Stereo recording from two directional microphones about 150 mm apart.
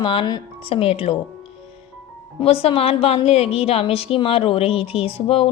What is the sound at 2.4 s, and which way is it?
A woman's voice, 40° left (ahead or behind).